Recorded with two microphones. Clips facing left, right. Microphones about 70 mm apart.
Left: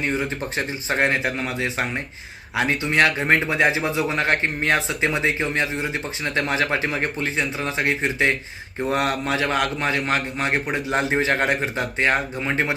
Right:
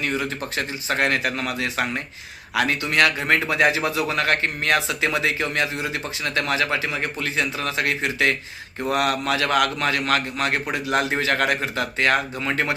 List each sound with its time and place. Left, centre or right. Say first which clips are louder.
0.0 s speech: left 1 dB; left
7.3 s speech: even; left